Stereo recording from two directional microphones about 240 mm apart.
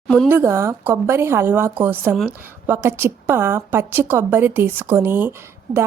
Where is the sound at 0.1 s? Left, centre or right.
Centre.